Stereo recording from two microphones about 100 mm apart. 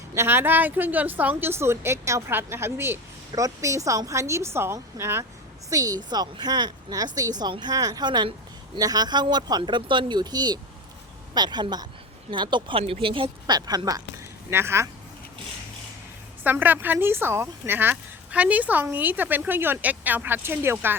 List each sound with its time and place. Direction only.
0.1 s speech: 25° right (ahead or behind)
5.7 s speech: 40° right (ahead or behind)
12.8 s speech: 65° right (ahead or behind)
13.6 s speech: 40° right (ahead or behind)
14.5 s speech: 25° right (ahead or behind)
16.4 s speech: 20° right (ahead or behind)